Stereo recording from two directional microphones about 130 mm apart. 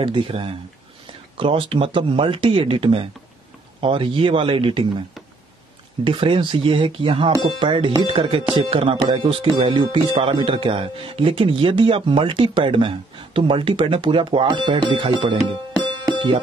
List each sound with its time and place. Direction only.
0.0 s speech: 40° right (ahead or behind)
6.0 s speech: 40° right (ahead or behind)
8.1 s music: 45° right (ahead or behind)
8.5 s speech: 40° right (ahead or behind)